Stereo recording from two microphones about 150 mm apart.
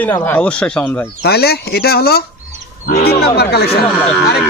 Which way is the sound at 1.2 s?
90° left.